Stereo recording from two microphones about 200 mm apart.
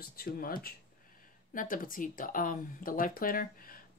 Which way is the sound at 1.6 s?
45° left (ahead or behind).